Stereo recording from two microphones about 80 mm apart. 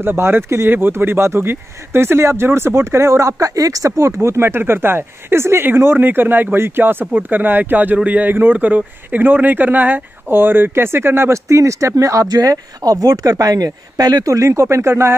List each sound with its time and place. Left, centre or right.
0.0 s speech: right
11.4 s speech: right
12.3 s speech: right